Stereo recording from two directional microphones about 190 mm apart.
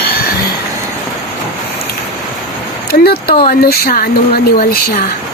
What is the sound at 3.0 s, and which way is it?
Speech, 55° left (ahead or behind).